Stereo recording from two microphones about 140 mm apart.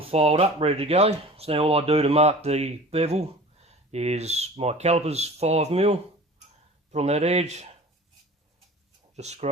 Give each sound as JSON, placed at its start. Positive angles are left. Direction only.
{"t": 0.0, "sound": "speech", "side_deg": -45}
{"t": 9.1, "sound": "speech", "side_deg": -50}